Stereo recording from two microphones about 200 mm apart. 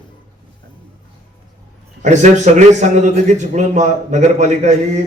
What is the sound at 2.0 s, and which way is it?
A man's voice, 35° right (ahead or behind).